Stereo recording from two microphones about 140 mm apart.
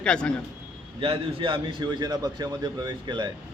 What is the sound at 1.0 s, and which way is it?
A man's voice, 40° right (ahead or behind).